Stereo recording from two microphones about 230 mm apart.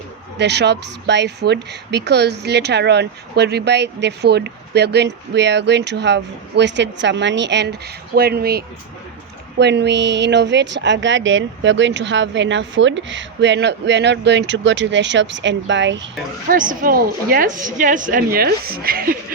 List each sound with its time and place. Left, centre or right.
0.3 s a woman's voice: right
16.5 s a woman's voice: right